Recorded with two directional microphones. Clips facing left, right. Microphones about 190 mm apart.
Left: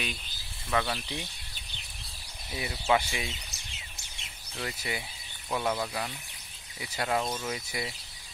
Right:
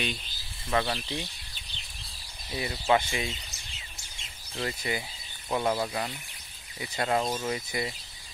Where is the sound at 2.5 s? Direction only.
5° left (ahead or behind).